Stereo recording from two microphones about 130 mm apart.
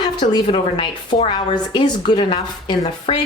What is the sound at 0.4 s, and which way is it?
A woman's voice, 45° left (ahead or behind).